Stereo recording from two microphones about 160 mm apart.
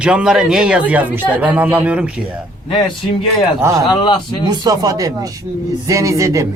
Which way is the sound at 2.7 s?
30° left (ahead or behind).